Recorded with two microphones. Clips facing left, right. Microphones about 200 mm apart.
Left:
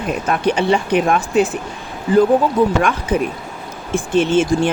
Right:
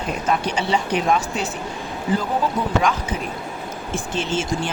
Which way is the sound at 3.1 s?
55° left (ahead or behind).